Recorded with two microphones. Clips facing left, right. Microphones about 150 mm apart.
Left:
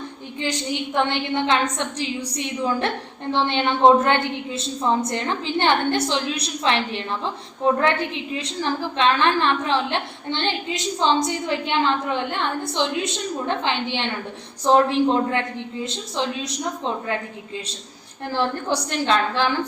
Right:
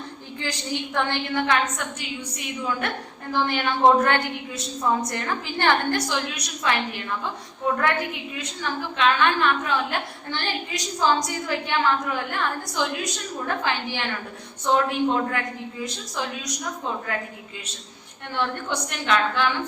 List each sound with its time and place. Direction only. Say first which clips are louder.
0.3 s a woman's voice: left 4 dB; 20° left (ahead or behind)
1.8 s a woman's voice: left 6 dB; 35° left (ahead or behind)
14.6 s a woman's voice: left 5 dB; 35° left (ahead or behind)
18.3 s a woman's voice: left 4 dB; 35° left (ahead or behind)